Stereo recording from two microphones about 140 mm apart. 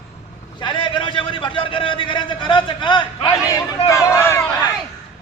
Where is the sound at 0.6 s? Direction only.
35° left (ahead or behind).